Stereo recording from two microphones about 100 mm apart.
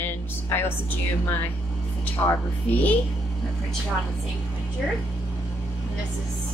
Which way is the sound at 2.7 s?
15° left (ahead or behind).